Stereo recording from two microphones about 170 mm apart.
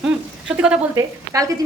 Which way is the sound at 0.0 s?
5° right (ahead or behind).